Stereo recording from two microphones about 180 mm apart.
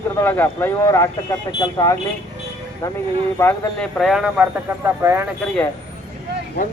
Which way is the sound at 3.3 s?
20° left (ahead or behind).